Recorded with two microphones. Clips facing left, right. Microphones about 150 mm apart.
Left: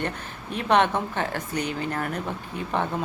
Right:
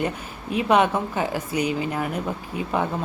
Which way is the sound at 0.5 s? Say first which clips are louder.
Right 2 dB; 5° right (ahead or behind).